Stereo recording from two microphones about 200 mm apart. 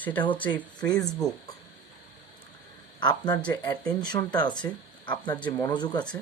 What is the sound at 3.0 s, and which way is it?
Speech, 20° left (ahead or behind).